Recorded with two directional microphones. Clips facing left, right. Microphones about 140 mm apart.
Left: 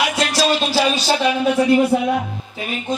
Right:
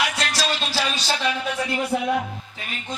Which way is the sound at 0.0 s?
15° left (ahead or behind).